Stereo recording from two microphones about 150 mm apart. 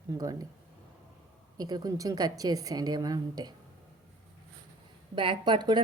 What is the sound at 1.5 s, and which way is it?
A woman's voice, 25° right (ahead or behind).